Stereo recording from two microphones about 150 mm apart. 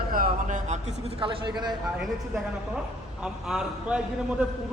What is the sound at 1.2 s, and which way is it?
Speech, 30° right (ahead or behind).